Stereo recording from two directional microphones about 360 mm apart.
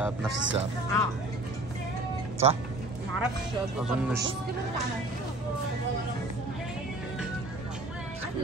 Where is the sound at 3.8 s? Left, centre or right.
Centre.